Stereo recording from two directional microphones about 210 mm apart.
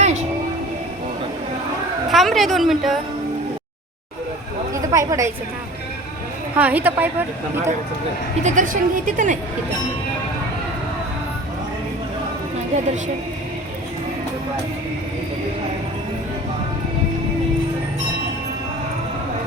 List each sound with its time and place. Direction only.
0.0 s train: 35° right (ahead or behind)
2.0 s a woman's voice: centre (ahead or behind)
4.7 s a sound: 15° right (ahead or behind)
6.6 s a woman's voice: 10° right (ahead or behind)
8.4 s a woman's voice: 40° right (ahead or behind)